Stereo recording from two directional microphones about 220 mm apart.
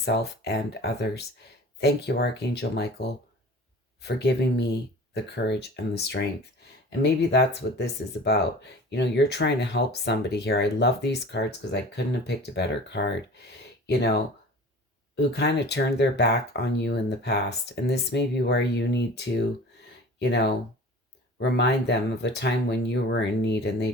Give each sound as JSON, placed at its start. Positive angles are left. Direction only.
{"t": 0.0, "sound": "speech", "side_deg": 50}
{"t": 4.0, "sound": "speech", "side_deg": 50}